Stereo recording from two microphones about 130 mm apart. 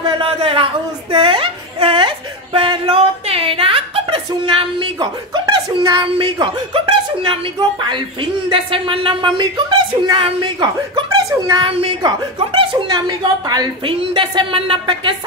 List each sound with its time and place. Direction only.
0.2 s speech: 45° right (ahead or behind)